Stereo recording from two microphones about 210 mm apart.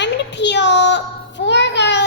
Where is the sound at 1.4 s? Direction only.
55° left (ahead or behind).